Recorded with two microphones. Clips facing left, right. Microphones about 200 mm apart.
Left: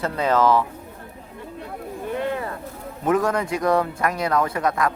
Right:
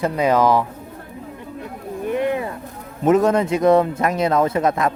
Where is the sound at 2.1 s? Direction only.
15° right (ahead or behind).